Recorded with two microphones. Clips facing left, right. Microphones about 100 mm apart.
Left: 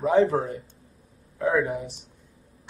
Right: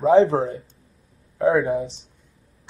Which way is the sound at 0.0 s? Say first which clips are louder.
Right 5 dB; 30° right (ahead or behind).